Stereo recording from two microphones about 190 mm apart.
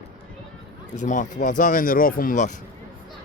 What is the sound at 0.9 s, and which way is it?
Speech, 40° left (ahead or behind).